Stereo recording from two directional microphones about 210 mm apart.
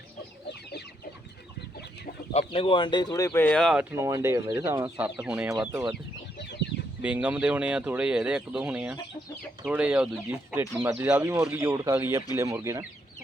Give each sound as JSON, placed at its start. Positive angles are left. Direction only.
{"t": 2.5, "sound": "speech", "side_deg": 25}
{"t": 3.9, "sound": "speech", "side_deg": -15}
{"t": 7.0, "sound": "speech", "side_deg": -5}